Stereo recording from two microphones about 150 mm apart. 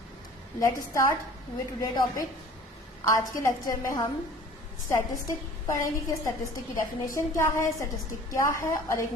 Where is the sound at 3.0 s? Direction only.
20° left (ahead or behind).